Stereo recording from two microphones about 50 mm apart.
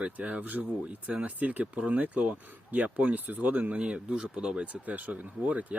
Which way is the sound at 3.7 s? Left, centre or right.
Centre.